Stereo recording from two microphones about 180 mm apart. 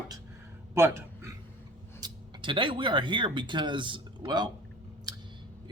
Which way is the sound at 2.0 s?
25° right (ahead or behind).